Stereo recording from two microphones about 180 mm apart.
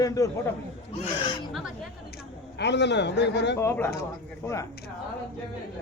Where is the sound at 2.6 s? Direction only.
75° left (ahead or behind).